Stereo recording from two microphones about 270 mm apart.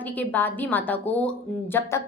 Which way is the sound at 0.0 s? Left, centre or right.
Centre.